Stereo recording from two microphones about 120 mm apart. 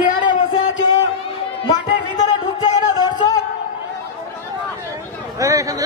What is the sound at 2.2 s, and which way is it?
Music, 35° left (ahead or behind).